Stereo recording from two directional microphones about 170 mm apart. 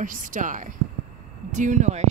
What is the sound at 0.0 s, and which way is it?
Speech, 50° right (ahead or behind).